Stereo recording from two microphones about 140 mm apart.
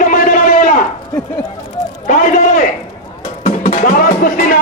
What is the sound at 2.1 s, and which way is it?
Speech, 65° left (ahead or behind).